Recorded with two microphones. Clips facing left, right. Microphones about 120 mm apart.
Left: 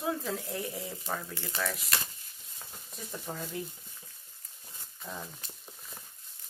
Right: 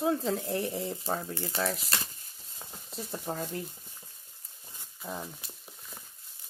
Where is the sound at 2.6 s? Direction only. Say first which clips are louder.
Right 5 dB; 30° right (ahead or behind).